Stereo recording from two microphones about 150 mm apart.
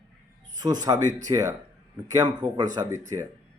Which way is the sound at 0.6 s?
25° right (ahead or behind).